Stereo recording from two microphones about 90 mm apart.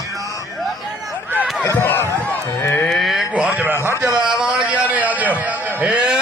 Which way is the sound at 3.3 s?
15° right (ahead or behind).